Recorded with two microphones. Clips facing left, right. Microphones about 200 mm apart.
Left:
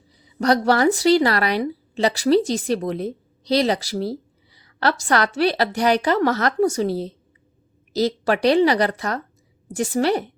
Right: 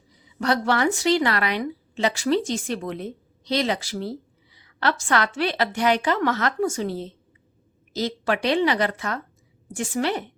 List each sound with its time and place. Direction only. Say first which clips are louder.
0.3 s speech: left 5 dB; 40° left (ahead or behind)